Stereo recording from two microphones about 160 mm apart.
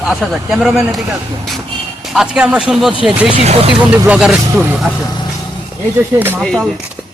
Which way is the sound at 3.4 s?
40° right (ahead or behind).